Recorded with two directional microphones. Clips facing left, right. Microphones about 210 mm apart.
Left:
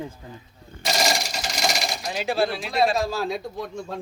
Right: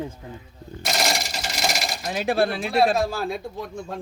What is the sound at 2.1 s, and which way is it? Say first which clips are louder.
Speech: right 2 dB; 55° right (ahead or behind).